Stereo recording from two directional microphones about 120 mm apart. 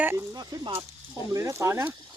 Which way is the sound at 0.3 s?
35° right (ahead or behind).